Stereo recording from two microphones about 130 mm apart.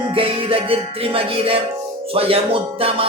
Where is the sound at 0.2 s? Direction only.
45° right (ahead or behind).